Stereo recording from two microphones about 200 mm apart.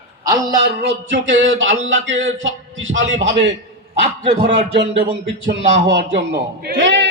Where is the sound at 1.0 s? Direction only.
65° right (ahead or behind).